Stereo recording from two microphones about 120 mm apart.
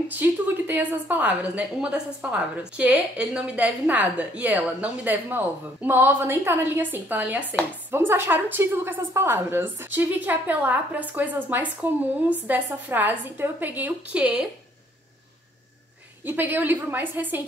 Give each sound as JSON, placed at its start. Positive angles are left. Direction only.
{"t": 0.1, "sound": "a woman's voice", "side_deg": -15}
{"t": 16.3, "sound": "a woman's voice", "side_deg": -15}